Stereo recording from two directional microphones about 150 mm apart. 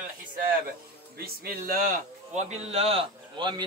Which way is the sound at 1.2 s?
75° right (ahead or behind).